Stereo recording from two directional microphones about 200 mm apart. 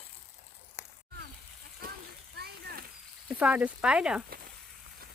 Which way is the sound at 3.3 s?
5° right (ahead or behind).